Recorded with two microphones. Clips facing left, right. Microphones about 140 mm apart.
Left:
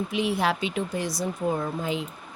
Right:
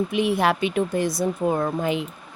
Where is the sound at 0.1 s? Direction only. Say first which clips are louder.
Right 4 dB; 55° right (ahead or behind).